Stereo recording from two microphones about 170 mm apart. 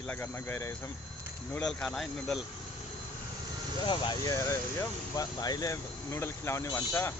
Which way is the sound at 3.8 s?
25° left (ahead or behind).